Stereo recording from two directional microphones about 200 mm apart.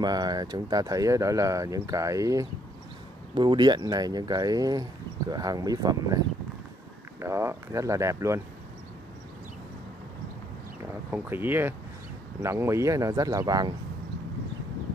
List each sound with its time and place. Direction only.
0.0 s speech: 20° right (ahead or behind)
11.1 s speech: 10° right (ahead or behind)